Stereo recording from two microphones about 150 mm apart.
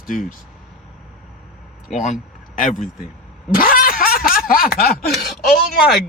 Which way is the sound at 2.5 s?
60° left (ahead or behind).